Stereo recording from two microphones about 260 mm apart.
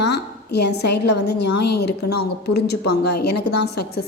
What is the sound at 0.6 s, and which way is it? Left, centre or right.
Speech, left.